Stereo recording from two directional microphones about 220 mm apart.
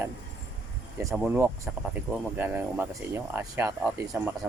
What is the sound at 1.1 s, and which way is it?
Speech, 5° right (ahead or behind).